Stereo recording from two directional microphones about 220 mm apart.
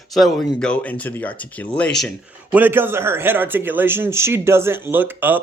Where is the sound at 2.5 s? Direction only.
10° right (ahead or behind).